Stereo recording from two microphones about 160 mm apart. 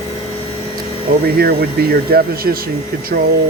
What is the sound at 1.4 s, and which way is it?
Speech, 70° right (ahead or behind).